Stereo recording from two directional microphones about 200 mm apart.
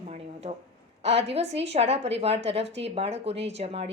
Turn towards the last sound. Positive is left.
turn(degrees=-30)  # may be behind; listen again after turning